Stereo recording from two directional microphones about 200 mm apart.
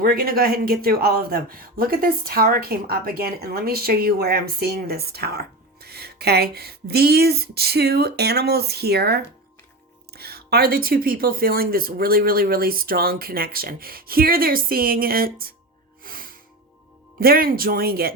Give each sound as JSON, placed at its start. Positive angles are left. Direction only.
{"t": 0.0, "sound": "speech", "side_deg": -45}
{"t": 16.0, "sound": "music", "side_deg": -45}
{"t": 17.2, "sound": "speech", "side_deg": -50}